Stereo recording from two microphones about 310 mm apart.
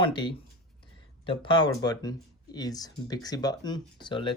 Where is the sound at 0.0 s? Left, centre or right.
Centre.